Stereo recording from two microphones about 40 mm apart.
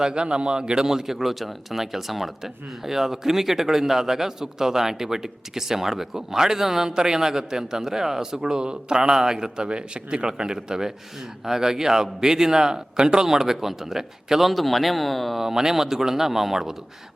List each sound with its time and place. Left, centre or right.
0.0 s a man's voice: right
12.7 s a man's voice: centre
15.4 s a man's voice: centre